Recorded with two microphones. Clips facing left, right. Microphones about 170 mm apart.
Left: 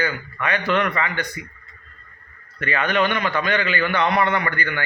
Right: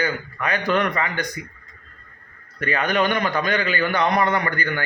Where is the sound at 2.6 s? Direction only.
40° right (ahead or behind).